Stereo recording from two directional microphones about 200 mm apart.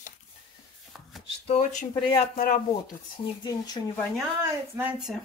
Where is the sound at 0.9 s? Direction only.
Centre (ahead or behind).